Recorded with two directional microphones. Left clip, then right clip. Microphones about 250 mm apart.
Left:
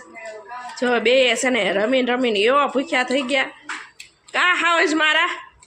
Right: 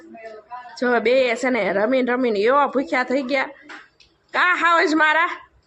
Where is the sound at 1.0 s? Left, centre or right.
Centre.